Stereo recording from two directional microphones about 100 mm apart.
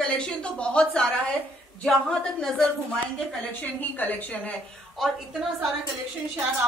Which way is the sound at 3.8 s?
15° left (ahead or behind).